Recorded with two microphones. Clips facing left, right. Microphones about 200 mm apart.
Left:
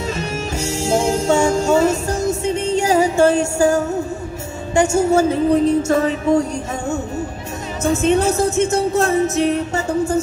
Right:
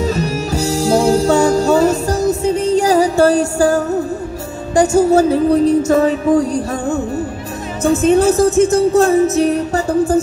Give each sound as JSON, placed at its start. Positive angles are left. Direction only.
{"t": 0.0, "sound": "music", "side_deg": -35}
{"t": 7.8, "sound": "music", "side_deg": -35}